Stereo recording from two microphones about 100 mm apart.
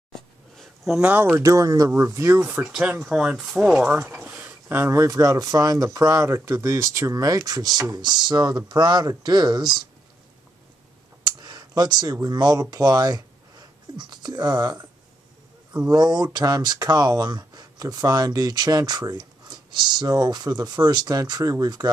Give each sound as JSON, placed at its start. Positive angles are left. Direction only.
{"t": 0.1, "sound": "a sound", "side_deg": 5}
{"t": 1.1, "sound": "speech", "side_deg": -20}
{"t": 1.4, "sound": "speech", "side_deg": -35}
{"t": 2.4, "sound": "speech", "side_deg": -10}
{"t": 11.3, "sound": "speech", "side_deg": -45}
{"t": 15.9, "sound": "speech", "side_deg": -40}